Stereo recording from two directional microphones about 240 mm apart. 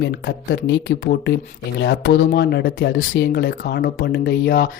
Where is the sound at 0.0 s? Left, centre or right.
Left.